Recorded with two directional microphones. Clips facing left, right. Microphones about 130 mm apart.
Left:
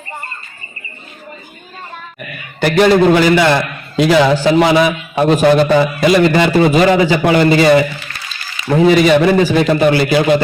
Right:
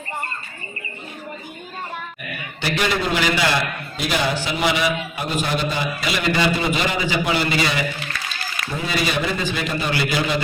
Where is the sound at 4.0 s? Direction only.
85° left.